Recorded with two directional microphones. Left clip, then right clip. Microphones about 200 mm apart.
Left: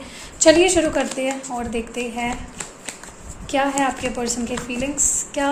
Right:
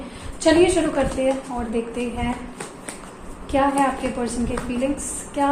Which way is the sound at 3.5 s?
60° left (ahead or behind).